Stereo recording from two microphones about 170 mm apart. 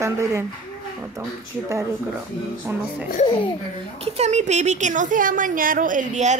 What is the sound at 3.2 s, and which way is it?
Speech, 30° left (ahead or behind).